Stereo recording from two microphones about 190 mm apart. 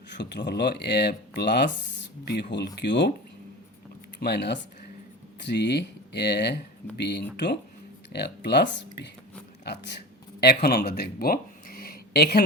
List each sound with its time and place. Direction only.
0.1 s speech: 65° left (ahead or behind)
4.2 s speech: 60° left (ahead or behind)